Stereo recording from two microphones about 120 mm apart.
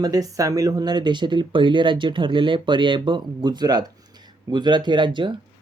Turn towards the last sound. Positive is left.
turn(degrees=-40)  # may be behind; listen again after turning